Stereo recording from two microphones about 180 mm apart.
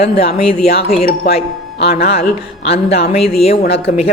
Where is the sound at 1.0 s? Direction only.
55° left (ahead or behind).